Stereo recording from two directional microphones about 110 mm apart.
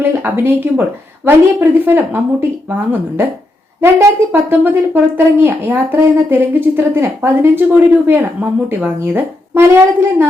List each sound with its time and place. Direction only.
0.0 s speech: 20° right (ahead or behind)
4.3 s speech: 20° right (ahead or behind)